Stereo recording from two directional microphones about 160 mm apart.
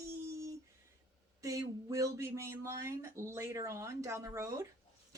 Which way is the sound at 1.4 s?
20° right (ahead or behind).